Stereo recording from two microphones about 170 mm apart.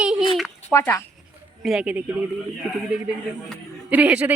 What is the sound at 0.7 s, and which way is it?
Speech, 15° left (ahead or behind).